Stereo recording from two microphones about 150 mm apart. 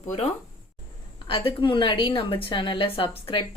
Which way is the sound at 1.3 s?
40° left (ahead or behind).